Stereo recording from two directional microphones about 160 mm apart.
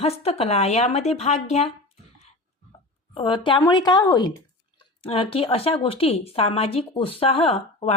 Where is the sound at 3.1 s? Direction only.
30° left (ahead or behind).